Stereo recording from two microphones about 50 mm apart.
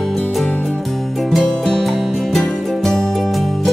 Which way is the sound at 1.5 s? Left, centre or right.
Centre.